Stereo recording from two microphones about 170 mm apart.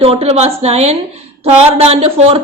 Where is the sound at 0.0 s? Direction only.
35° right (ahead or behind).